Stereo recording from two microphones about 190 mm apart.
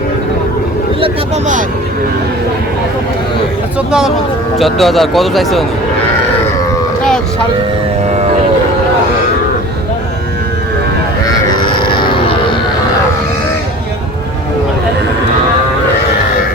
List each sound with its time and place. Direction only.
3.8 s a man's voice: 5° right (ahead or behind)
11.6 s music: 25° left (ahead or behind)